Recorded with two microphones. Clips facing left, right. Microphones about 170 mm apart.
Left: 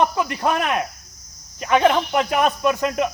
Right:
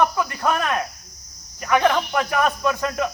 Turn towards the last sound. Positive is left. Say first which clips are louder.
# left 3 dB
turn(degrees=20)  # may be behind; listen again after turning